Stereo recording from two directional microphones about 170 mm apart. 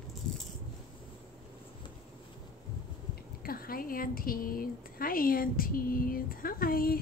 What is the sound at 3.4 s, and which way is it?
Speech, 60° left (ahead or behind).